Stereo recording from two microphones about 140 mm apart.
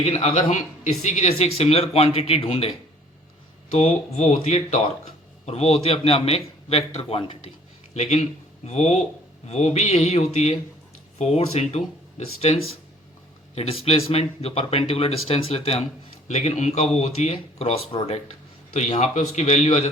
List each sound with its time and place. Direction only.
0.0 s speech: 50° left (ahead or behind)
13.6 s speech: 45° left (ahead or behind)